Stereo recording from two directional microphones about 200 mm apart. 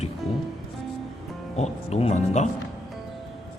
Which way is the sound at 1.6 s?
30° left (ahead or behind).